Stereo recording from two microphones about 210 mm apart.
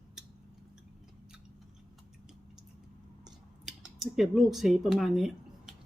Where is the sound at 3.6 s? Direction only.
Centre (ahead or behind).